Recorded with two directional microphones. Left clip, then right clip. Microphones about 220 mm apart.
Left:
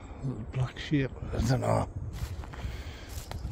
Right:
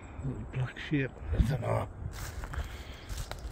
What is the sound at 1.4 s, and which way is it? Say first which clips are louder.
Speech: left 5 dB; 30° left (ahead or behind).